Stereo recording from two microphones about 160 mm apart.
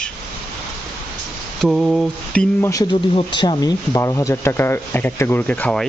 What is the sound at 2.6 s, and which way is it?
Speech, 20° left (ahead or behind).